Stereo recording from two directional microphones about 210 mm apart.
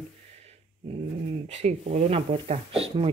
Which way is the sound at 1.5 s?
35° right (ahead or behind).